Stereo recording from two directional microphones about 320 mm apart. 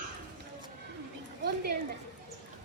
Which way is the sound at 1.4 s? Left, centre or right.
Right.